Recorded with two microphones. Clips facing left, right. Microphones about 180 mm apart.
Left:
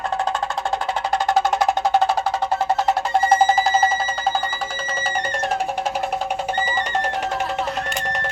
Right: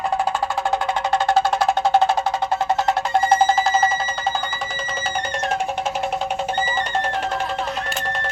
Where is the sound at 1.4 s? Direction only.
15° left (ahead or behind).